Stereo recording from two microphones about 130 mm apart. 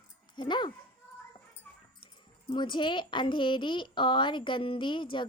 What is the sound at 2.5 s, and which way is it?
Speech, 40° left (ahead or behind).